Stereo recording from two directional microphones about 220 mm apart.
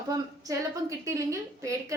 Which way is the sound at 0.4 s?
15° right (ahead or behind).